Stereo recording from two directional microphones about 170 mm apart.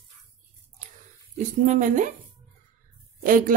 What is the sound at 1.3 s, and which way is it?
Speech, 45° right (ahead or behind).